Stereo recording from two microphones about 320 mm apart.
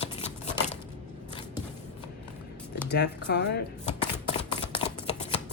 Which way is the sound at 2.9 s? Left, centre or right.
Left.